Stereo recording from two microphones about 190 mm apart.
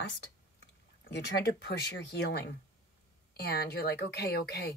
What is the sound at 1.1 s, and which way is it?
A woman's voice, 65° left (ahead or behind).